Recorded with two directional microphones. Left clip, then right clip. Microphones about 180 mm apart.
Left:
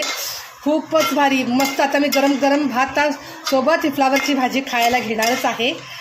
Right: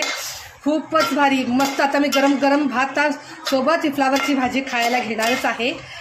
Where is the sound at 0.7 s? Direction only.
5° left (ahead or behind).